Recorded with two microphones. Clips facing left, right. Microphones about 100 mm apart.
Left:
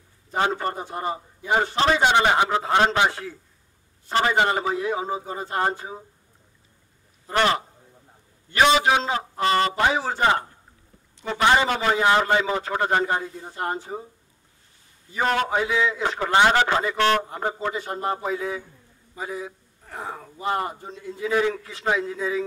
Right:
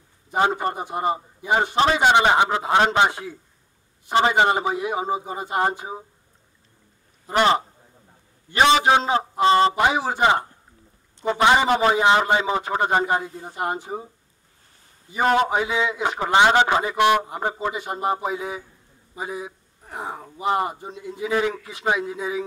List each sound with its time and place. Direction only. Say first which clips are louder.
0.3 s a man's voice: right 3 dB; 15° right (ahead or behind)
7.2 s a man's voice: right 3 dB; 20° right (ahead or behind)
11.4 s a man's voice: right 2 dB; 20° right (ahead or behind)
15.0 s a man's voice: right 4 dB; 20° right (ahead or behind)